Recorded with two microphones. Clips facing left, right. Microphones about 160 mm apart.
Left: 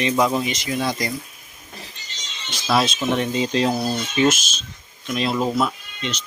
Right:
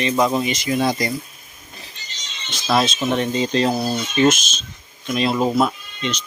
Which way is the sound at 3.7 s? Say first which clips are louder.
Right 1 dB; 10° right (ahead or behind).